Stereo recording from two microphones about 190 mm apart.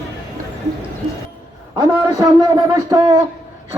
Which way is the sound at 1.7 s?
20° right (ahead or behind).